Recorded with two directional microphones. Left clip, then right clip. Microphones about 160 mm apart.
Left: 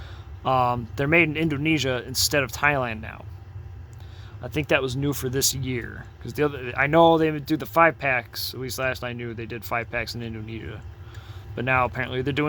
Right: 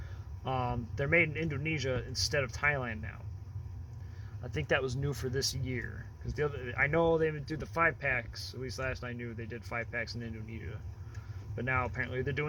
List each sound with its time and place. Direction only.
0.4 s speech: 45° left (ahead or behind)
4.4 s speech: 35° left (ahead or behind); by 8.3 s 80° left
8.8 s speech: 70° left (ahead or behind)